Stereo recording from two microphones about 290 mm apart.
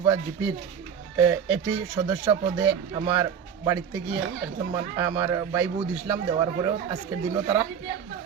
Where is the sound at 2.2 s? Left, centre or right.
Centre.